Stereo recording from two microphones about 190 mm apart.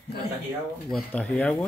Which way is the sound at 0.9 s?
5° left (ahead or behind).